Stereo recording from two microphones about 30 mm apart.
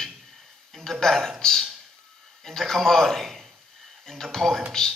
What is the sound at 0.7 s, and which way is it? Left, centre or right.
A man's voice, centre.